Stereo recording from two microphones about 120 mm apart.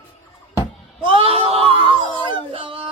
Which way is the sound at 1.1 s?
50° right (ahead or behind).